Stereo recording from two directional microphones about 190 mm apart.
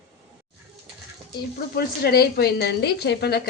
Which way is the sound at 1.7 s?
55° left (ahead or behind).